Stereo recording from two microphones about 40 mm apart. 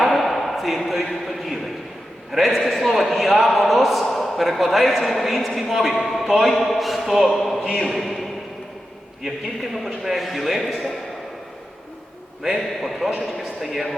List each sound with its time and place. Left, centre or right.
0.0 s a sound: centre
1.2 s a man's voice: centre
12.5 s a man's voice: centre